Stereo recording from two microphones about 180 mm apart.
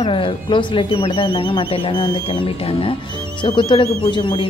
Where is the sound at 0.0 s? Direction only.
30° left (ahead or behind).